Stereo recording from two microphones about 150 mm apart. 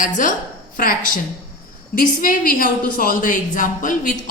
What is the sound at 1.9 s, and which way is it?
A woman's voice, 70° left (ahead or behind).